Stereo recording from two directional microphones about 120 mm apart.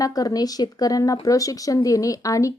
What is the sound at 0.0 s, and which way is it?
A woman's voice, 30° left (ahead or behind).